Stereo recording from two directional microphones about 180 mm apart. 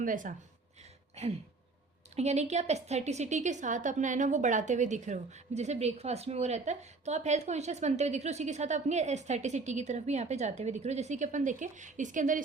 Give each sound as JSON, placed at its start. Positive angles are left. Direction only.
{"t": 0.0, "sound": "speech", "side_deg": -45}
{"t": 1.1, "sound": "throat clearing", "side_deg": -40}
{"t": 2.1, "sound": "a woman's voice", "side_deg": -40}